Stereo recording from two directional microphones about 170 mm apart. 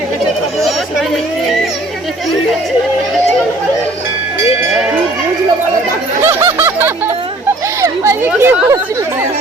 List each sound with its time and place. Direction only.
6.2 s snicker: 15° right (ahead or behind)
7.8 s chatter: 15° right (ahead or behind)